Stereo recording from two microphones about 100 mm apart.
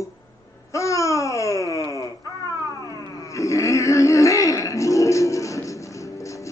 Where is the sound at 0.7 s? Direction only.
30° left (ahead or behind).